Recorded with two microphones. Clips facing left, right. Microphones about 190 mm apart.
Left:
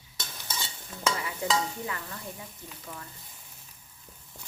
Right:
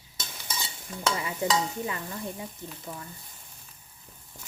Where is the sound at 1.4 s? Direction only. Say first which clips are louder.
Right 2 dB; 20° right (ahead or behind).